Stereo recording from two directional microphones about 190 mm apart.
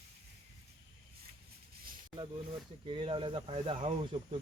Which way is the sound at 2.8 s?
25° right (ahead or behind).